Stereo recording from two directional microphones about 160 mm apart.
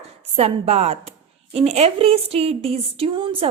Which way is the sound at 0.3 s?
40° right (ahead or behind).